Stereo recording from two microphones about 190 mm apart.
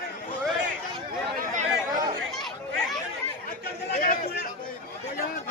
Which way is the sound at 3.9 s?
50° left (ahead or behind).